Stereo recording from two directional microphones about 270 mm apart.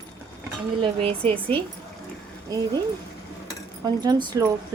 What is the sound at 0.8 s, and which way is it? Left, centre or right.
Speech, centre.